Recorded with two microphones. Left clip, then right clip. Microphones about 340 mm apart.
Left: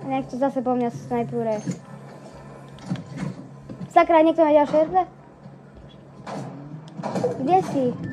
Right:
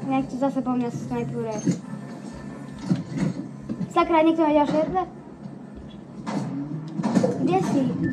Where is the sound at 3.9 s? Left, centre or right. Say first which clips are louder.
Left 4 dB; left.